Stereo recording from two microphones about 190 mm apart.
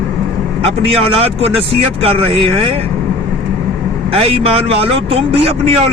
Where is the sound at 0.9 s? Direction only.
30° right (ahead or behind).